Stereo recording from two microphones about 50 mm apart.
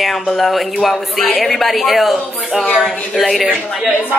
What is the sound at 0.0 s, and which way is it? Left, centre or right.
Speech, centre.